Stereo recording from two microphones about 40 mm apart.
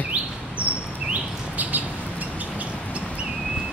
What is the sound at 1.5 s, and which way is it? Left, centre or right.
Bird, right.